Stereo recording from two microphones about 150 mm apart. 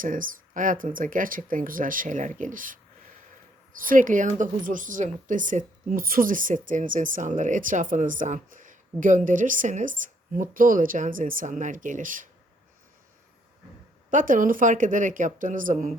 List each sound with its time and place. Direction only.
0.0 s speech: 65° right (ahead or behind)
3.8 s speech: 65° right (ahead or behind)
14.1 s speech: 60° right (ahead or behind)